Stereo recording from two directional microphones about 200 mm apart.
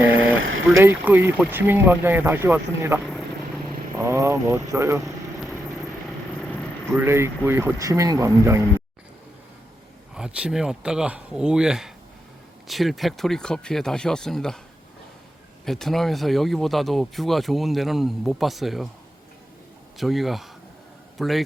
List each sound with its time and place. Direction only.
0.4 s boat: 80° right
0.8 s speech: 10° right (ahead or behind)
3.0 s vehicle: centre (ahead or behind)
3.9 s speech: 15° right (ahead or behind)
6.1 s vehicle: 5° left (ahead or behind)
6.9 s speech: 10° right (ahead or behind)
10.2 s speech: 5° right (ahead or behind)
15.6 s speech: centre (ahead or behind)
20.0 s speech: centre (ahead or behind)